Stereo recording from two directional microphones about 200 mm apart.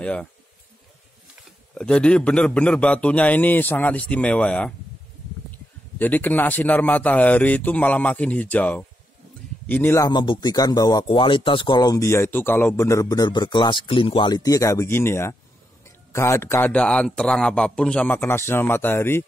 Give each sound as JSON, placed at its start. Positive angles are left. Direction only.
{"t": 0.0, "sound": "speech", "side_deg": 5}
{"t": 1.8, "sound": "a man's voice", "side_deg": 5}